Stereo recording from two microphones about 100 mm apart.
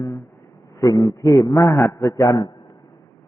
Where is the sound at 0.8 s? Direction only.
35° left (ahead or behind).